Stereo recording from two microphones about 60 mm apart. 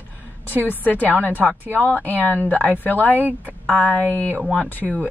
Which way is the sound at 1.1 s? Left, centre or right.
Right.